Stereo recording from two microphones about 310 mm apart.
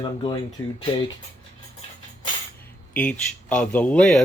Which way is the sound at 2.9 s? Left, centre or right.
Centre.